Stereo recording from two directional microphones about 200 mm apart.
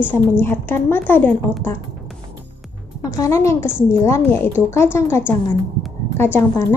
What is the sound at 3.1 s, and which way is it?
A woman's voice, 15° left (ahead or behind).